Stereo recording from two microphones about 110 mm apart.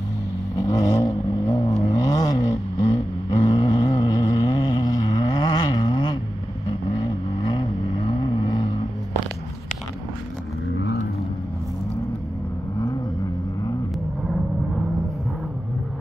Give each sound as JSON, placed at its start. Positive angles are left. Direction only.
{"t": 0.6, "sound": "vehicle", "side_deg": 35}